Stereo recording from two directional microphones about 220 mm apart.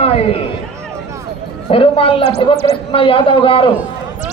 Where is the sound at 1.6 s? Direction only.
25° left (ahead or behind).